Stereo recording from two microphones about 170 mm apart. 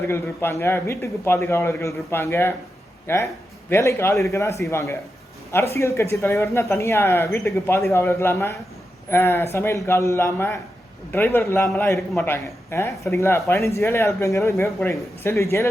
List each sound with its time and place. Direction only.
0.1 s a man's voice: 15° left (ahead or behind)